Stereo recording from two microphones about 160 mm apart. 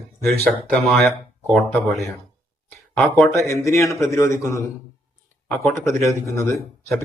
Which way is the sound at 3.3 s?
15° left (ahead or behind).